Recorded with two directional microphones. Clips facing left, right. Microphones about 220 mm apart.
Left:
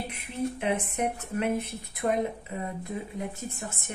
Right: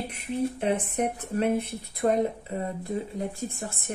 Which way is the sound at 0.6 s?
40° right (ahead or behind).